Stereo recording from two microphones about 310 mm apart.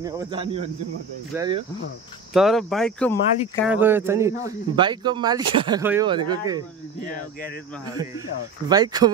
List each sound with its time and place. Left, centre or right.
0.0 s speech: centre
2.3 s speech: centre
3.7 s speech: centre
8.6 s speech: centre